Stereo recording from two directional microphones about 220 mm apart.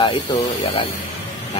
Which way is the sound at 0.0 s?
25° left (ahead or behind).